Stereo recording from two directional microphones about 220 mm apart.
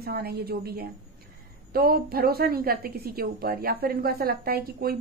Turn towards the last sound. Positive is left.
turn(degrees=-45)  # may be behind; listen again after turning